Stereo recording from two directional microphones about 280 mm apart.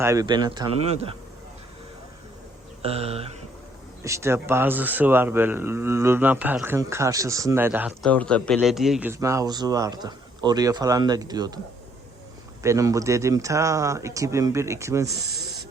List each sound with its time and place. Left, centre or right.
0.0 s speech: centre
2.8 s speech: right
4.0 s speech: centre
12.6 s speech: centre